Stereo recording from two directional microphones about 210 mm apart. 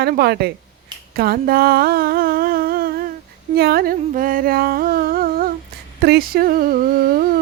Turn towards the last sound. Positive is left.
turn(degrees=-40)  # may be behind; listen again after turning